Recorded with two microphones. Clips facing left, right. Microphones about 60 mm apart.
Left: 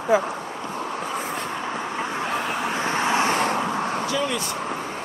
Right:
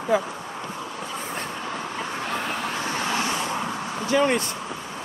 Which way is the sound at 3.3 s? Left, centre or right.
Left.